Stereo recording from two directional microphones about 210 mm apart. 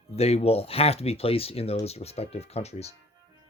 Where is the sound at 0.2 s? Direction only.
30° left (ahead or behind).